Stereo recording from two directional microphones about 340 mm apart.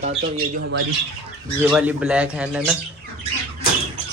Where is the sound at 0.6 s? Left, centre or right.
Right.